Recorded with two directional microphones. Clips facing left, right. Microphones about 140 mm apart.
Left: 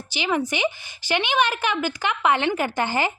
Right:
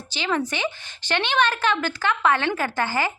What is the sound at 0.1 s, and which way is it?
Speech, 15° left (ahead or behind).